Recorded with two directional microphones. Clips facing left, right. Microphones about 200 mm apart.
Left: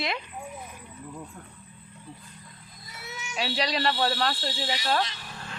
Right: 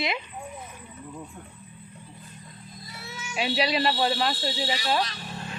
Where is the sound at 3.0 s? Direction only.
20° left (ahead or behind).